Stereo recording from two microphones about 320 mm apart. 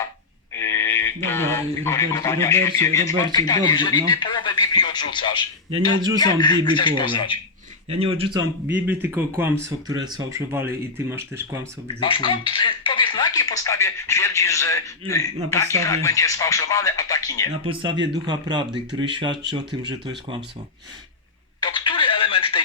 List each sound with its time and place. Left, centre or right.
0.5 s speech: centre
4.4 s music: centre
5.1 s speech: centre
7.9 s speech: centre
11.9 s speech: centre
17.6 s speech: centre
21.6 s telephone: centre